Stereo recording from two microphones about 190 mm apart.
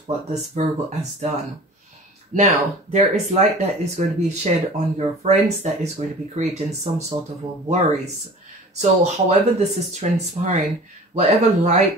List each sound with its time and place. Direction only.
0.0 s speech: 35° right (ahead or behind)
2.3 s speech: 35° right (ahead or behind)